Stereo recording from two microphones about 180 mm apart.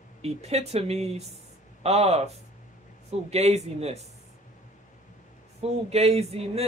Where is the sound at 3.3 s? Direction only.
35° right (ahead or behind).